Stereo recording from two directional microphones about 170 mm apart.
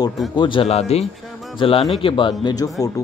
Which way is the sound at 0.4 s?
30° left (ahead or behind).